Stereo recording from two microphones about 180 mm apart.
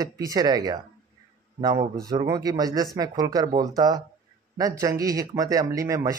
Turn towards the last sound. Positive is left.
turn(degrees=-20)  # may be behind; listen again after turning